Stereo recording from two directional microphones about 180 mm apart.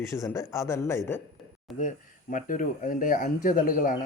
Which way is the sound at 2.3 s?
50° left (ahead or behind).